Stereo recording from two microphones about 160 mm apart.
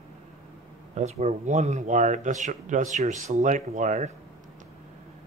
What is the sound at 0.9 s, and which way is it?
Speech, 45° right (ahead or behind).